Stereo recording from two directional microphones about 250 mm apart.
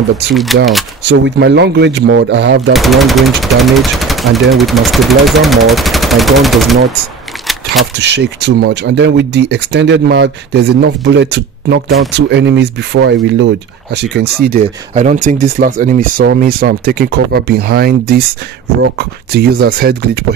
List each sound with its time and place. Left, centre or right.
0.3 s speech: centre
1.0 s speech: right
2.7 s speech: centre
7.8 s speech: right